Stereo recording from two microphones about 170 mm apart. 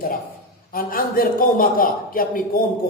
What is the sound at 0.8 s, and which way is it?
A man's voice, 60° left (ahead or behind).